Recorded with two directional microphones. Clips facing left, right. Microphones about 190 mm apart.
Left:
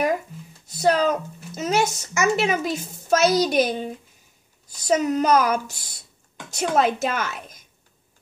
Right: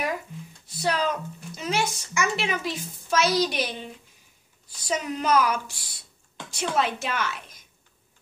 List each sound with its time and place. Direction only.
0.7 s speech: 45° left (ahead or behind)